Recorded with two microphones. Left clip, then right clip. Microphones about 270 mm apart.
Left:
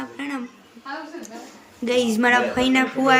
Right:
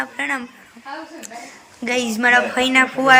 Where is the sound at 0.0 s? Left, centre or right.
Centre.